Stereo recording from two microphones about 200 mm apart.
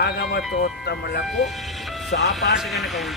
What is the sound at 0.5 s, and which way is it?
Music, 55° left (ahead or behind).